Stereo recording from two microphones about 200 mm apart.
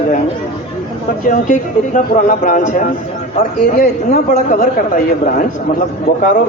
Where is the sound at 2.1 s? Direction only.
40° left (ahead or behind).